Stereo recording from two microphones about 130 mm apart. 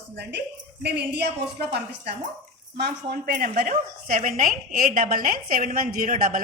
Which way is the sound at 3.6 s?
90° right.